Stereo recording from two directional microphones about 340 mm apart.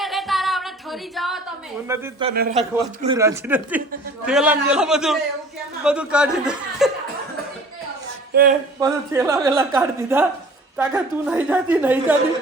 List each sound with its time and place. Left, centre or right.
0.0 s singing: centre
1.9 s a woman's voice: centre
2.3 s a man's voice: right
3.0 s a woman's voice: centre
8.3 s a sound: right
8.8 s a woman's voice: centre